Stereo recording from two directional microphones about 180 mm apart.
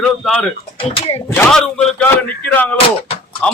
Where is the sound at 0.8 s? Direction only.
30° left (ahead or behind).